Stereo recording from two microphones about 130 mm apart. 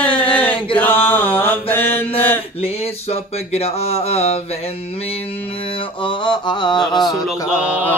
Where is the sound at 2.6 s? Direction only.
50° left (ahead or behind).